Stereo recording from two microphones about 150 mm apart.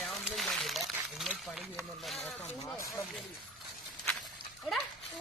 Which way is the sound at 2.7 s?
20° left (ahead or behind).